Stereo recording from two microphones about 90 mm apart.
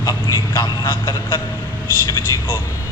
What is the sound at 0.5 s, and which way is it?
Speech, 45° left (ahead or behind).